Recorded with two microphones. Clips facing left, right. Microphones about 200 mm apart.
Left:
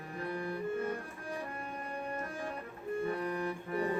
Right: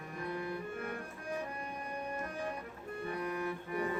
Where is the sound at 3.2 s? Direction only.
30° left (ahead or behind).